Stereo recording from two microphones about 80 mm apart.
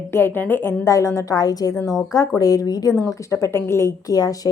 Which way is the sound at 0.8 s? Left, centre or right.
Left.